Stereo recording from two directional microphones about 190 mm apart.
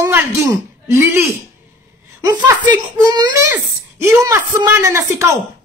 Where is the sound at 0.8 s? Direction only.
15° right (ahead or behind).